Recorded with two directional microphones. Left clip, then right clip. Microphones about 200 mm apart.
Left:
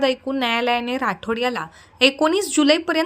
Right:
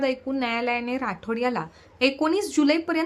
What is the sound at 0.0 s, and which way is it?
Speech, 20° left (ahead or behind).